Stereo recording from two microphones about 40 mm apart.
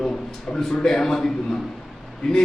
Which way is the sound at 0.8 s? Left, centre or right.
Centre.